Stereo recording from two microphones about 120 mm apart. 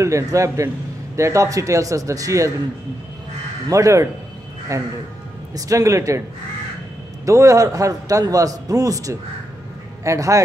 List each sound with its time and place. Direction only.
0.0 s a man's voice: 25° right (ahead or behind)
3.6 s a man's voice: 25° right (ahead or behind)
7.2 s a man's voice: 25° right (ahead or behind)